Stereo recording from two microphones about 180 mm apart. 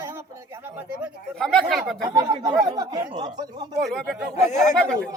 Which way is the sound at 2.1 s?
20° right (ahead or behind).